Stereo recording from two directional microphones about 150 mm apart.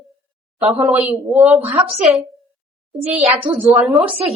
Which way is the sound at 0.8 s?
10° right (ahead or behind).